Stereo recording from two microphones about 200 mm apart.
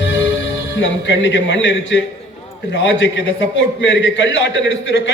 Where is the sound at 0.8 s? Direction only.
65° left (ahead or behind).